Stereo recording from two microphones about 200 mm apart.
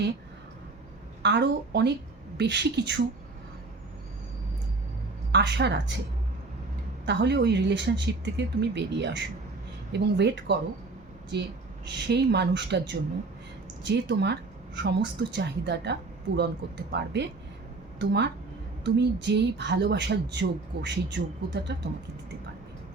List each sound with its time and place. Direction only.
1.2 s a woman's voice: 60° right (ahead or behind)
5.3 s a woman's voice: 60° right (ahead or behind)
7.0 s a woman's voice: 60° right (ahead or behind)
12.0 s a woman's voice: 55° right (ahead or behind)